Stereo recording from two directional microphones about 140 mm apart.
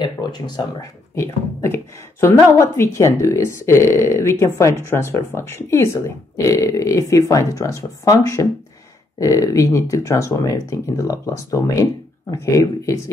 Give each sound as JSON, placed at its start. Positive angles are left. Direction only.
{"t": 0.0, "sound": "speech", "side_deg": 30}
{"t": 1.1, "sound": "speech", "side_deg": 20}